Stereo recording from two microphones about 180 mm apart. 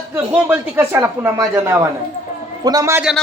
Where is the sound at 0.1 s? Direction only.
10° right (ahead or behind).